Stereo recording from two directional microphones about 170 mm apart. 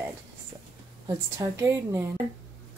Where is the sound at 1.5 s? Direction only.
15° right (ahead or behind).